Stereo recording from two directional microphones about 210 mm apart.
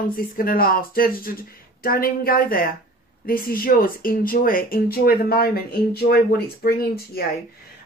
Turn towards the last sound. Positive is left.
turn(degrees=45)  # may be behind; listen again after turning